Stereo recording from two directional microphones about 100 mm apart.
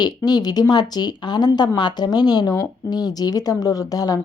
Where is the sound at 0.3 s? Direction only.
40° left (ahead or behind).